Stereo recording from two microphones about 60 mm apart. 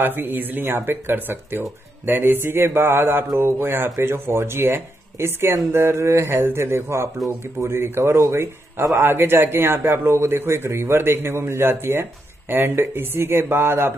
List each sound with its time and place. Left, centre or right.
0.0 s a man's voice: right
8.2 s speech: right
8.9 s a man's voice: right